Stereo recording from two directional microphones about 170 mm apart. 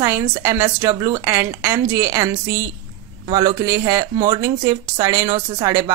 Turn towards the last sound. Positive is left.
turn(degrees=-20)  # may be behind; listen again after turning